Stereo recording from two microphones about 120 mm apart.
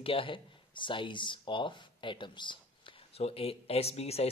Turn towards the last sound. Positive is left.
turn(degrees=60)  # may be behind; listen again after turning